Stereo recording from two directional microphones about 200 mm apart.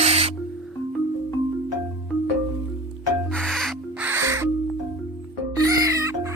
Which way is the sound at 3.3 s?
5° left (ahead or behind).